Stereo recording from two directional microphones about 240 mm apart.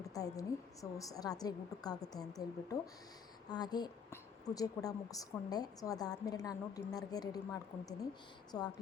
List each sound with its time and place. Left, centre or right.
0.0 s a woman's voice: centre